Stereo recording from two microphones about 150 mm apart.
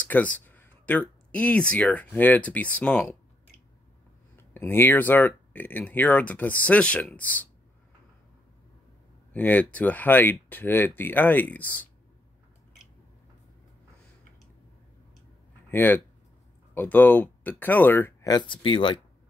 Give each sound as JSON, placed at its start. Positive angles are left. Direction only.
{"t": 0.1, "sound": "speech", "side_deg": 10}
{"t": 4.4, "sound": "speech", "side_deg": 15}
{"t": 9.3, "sound": "speech", "side_deg": 10}
{"t": 15.7, "sound": "speech", "side_deg": 15}
{"t": 18.2, "sound": "speech", "side_deg": 30}